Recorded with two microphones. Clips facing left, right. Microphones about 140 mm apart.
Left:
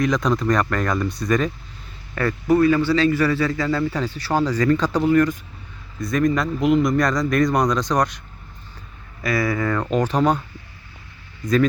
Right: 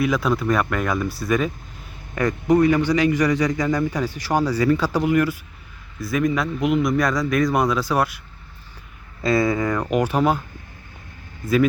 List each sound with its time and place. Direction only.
0.0 s a man's voice: 5° right (ahead or behind)
2.1 s a man's voice: 20° right (ahead or behind)
9.2 s a man's voice: 25° right (ahead or behind); by 10.4 s 5° right (ahead or behind)